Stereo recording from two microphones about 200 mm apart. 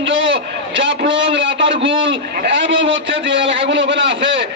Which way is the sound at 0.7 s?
65° right (ahead or behind).